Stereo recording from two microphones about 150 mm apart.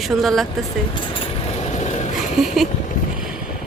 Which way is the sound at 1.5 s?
50° left (ahead or behind).